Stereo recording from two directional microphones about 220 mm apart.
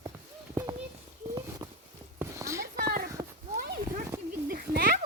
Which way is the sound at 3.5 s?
40° right (ahead or behind).